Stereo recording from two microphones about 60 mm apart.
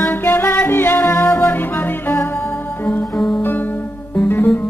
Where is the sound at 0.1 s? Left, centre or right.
Left.